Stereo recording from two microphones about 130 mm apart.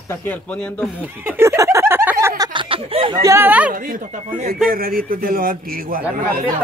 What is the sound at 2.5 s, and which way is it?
Speech, 45° right (ahead or behind).